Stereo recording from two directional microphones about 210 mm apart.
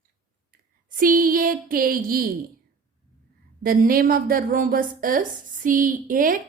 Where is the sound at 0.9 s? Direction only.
40° right (ahead or behind).